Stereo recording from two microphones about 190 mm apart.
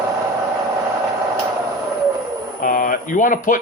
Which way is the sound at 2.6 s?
45° left (ahead or behind).